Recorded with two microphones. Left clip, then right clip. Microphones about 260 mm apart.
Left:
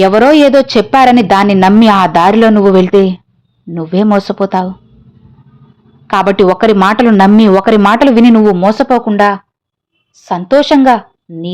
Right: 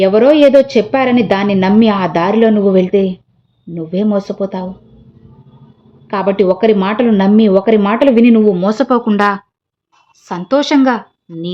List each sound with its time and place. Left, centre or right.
0.0 s speech: left
6.1 s speech: left
8.5 s a woman's voice: centre